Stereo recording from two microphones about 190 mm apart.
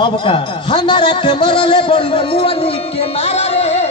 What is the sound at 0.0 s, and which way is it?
A man's voice, 25° left (ahead or behind).